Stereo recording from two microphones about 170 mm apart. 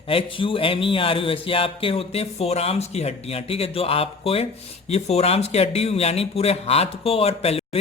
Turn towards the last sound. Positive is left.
turn(degrees=35)  # may be behind; listen again after turning